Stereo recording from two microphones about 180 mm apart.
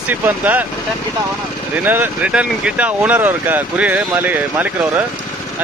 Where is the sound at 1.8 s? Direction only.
10° right (ahead or behind).